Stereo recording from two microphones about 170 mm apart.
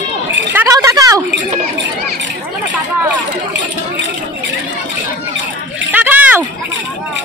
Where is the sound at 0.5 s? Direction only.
15° right (ahead or behind).